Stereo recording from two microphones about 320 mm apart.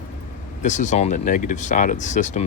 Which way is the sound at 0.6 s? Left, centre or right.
Left.